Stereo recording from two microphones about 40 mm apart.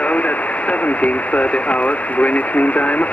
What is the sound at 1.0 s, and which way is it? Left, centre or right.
Speech, left.